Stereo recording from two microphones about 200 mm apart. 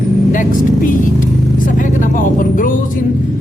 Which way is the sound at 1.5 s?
40° left (ahead or behind).